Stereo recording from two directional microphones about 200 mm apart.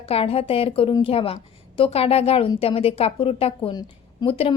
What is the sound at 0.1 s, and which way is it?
A woman's voice, 30° left (ahead or behind).